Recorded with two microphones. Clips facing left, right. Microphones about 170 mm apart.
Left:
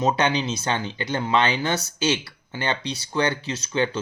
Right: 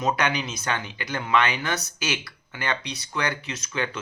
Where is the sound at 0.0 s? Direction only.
25° left (ahead or behind).